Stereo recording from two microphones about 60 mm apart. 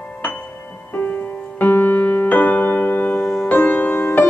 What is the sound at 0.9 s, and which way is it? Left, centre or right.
Music, left.